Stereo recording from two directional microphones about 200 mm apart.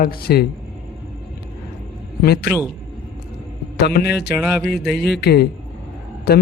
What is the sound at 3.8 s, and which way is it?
Speech, 55° left (ahead or behind).